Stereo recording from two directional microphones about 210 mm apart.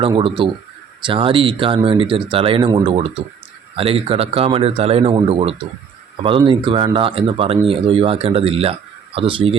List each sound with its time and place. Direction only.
0.0 s speech: 25° right (ahead or behind)